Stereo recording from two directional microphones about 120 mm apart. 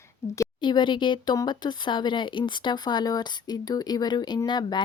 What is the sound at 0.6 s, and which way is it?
Speech, 40° left (ahead or behind).